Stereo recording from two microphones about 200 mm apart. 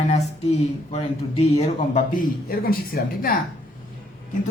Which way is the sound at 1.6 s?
35° left (ahead or behind).